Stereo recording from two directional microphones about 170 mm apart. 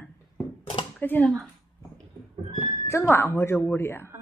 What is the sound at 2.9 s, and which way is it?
Speech, 15° left (ahead or behind).